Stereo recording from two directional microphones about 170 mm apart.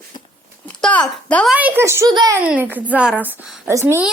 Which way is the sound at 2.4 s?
10° right (ahead or behind).